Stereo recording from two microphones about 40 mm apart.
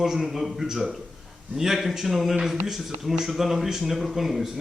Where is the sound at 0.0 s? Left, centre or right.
Centre.